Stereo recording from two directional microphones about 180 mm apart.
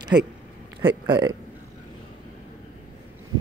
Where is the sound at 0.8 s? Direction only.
25° right (ahead or behind).